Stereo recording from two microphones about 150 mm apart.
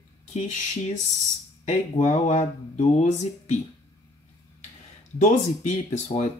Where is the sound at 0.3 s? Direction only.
45° left (ahead or behind).